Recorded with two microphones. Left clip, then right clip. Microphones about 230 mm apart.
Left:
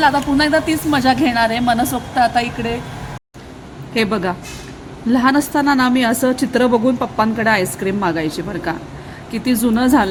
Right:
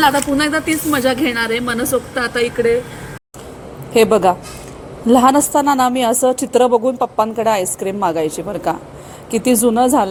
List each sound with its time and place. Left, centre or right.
0.0 s a woman's voice: centre
3.9 s a woman's voice: centre